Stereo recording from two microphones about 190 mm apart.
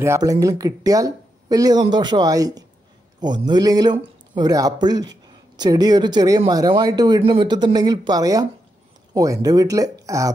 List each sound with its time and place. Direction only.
0.0 s speech: 15° right (ahead or behind)